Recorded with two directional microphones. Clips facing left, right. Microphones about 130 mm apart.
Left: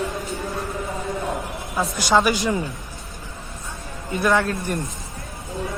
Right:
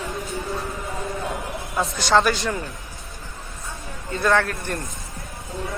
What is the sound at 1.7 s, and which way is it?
Speech, 10° left (ahead or behind).